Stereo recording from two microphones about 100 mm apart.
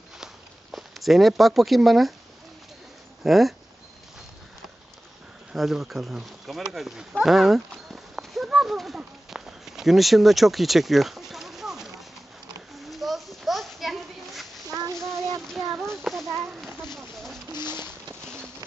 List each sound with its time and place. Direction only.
0.2 s walk: 5° right (ahead or behind)
3.3 s speech: centre (ahead or behind)
5.5 s speech: 5° right (ahead or behind)
6.7 s horse: 5° right (ahead or behind)
12.7 s children playing: centre (ahead or behind)
14.7 s child singing: 35° right (ahead or behind)
15.4 s child singing: centre (ahead or behind)
16.9 s a sound: 5° left (ahead or behind)